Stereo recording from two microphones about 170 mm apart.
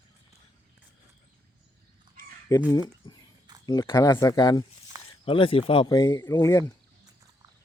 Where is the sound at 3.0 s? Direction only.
30° left (ahead or behind).